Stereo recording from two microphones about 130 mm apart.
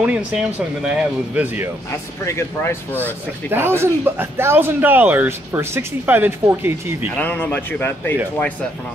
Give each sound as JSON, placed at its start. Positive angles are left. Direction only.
{"t": 0.0, "sound": "a man's voice", "side_deg": -5}
{"t": 1.9, "sound": "speech", "side_deg": 20}
{"t": 3.0, "sound": "a man's voice", "side_deg": -15}
{"t": 7.2, "sound": "a man's voice", "side_deg": 15}